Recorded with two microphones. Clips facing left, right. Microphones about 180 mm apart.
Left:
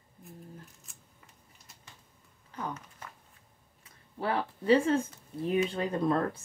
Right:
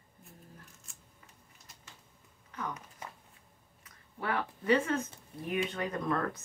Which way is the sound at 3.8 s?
30° left (ahead or behind).